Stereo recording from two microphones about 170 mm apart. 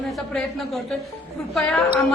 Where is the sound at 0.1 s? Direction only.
Centre (ahead or behind).